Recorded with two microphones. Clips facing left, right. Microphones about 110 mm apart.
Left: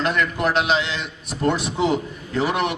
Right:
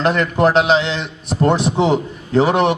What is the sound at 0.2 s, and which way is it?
A man's voice, 35° right (ahead or behind).